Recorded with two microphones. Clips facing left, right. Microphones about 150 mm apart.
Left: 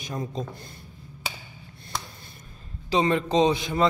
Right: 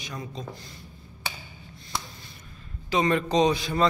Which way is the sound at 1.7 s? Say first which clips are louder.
Even; 55° left (ahead or behind).